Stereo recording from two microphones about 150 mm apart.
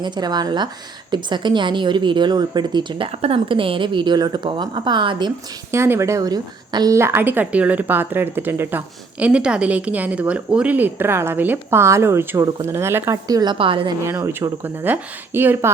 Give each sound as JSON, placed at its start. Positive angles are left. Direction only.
{"t": 0.0, "sound": "a woman's voice", "side_deg": -30}
{"t": 5.7, "sound": "a woman's voice", "side_deg": -15}
{"t": 14.0, "sound": "a woman's voice", "side_deg": -15}